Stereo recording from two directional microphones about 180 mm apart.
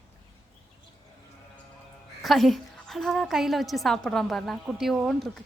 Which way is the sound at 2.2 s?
Centre (ahead or behind).